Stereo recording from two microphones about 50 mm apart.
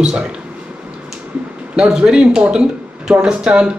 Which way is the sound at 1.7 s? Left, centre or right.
Centre.